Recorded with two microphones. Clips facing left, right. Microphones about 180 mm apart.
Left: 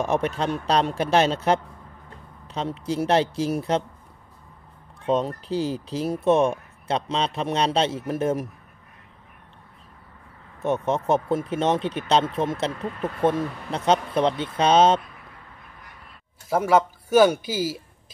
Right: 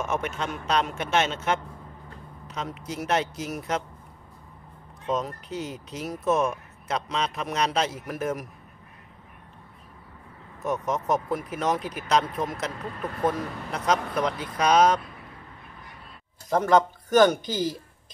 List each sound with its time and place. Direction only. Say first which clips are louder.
0.0 s speech: left 5 dB; 35° left (ahead or behind)
5.0 s speech: left 5 dB; 30° left (ahead or behind)
10.6 s speech: left 4 dB; 25° left (ahead or behind)
16.4 s speech: left 1 dB; 10° left (ahead or behind)